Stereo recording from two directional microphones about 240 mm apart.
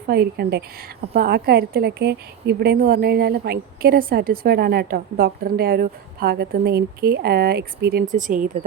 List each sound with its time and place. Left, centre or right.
0.1 s a woman's voice: right